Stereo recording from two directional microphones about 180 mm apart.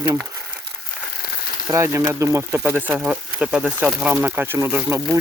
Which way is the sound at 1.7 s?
15° right (ahead or behind).